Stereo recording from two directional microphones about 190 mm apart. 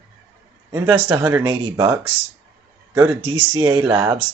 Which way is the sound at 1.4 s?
20° right (ahead or behind).